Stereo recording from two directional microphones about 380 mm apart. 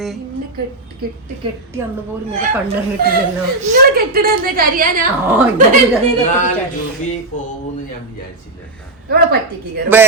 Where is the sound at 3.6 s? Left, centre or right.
Right.